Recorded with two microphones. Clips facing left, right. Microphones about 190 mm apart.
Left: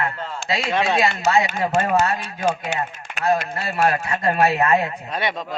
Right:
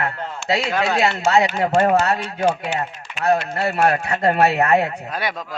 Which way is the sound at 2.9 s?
50° left (ahead or behind).